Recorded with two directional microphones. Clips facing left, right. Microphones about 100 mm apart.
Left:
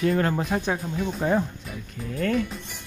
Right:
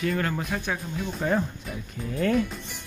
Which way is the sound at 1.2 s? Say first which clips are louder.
Left 2 dB; 15° left (ahead or behind).